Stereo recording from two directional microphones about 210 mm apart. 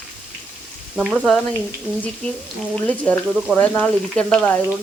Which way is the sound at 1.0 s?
Centre (ahead or behind).